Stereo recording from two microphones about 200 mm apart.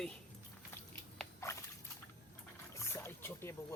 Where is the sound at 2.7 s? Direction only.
15° left (ahead or behind).